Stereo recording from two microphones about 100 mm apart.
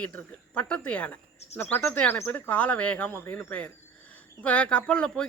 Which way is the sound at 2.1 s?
25° left (ahead or behind).